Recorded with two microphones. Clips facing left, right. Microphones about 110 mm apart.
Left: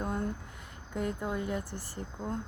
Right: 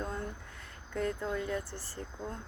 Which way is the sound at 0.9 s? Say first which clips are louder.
Even; 15° left (ahead or behind).